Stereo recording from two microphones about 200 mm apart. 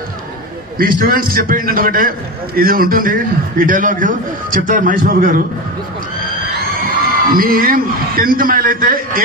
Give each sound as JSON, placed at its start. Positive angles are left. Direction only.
{"t": 0.7, "sound": "a man's voice", "side_deg": -45}
{"t": 7.2, "sound": "a man's voice", "side_deg": -45}